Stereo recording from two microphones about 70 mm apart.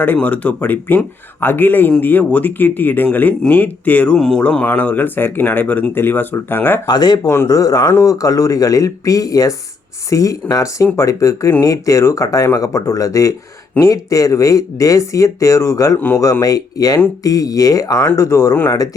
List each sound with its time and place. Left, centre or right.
0.0 s speech: left
4.1 s speech: centre; by 6.7 s left
6.8 s speech: left
7.4 s speech: left